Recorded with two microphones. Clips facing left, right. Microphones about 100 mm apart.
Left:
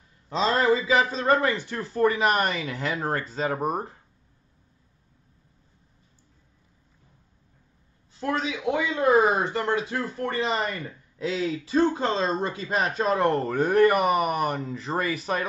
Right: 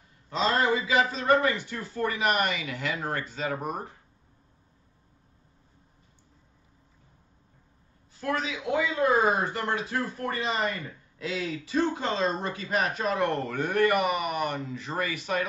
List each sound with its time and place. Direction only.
0.3 s speech: 35° left (ahead or behind)
8.2 s speech: 25° left (ahead or behind)